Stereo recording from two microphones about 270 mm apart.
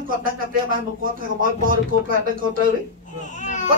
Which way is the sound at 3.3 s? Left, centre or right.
Left.